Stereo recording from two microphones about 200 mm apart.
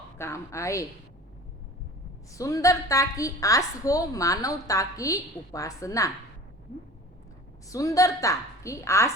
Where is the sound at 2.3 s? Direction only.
15° left (ahead or behind).